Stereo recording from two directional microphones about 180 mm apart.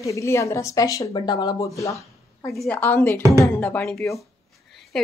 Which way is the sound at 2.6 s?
10° left (ahead or behind).